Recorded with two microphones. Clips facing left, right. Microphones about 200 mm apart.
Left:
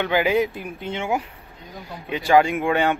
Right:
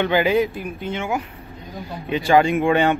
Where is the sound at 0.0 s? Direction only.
10° left (ahead or behind); by 1.2 s 25° left (ahead or behind).